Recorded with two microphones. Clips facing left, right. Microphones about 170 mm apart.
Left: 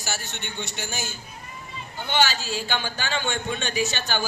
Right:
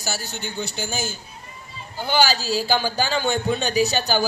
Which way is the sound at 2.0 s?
35° right (ahead or behind).